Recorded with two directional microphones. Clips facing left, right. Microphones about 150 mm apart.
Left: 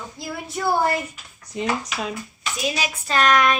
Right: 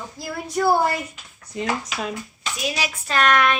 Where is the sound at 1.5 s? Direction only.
20° left (ahead or behind).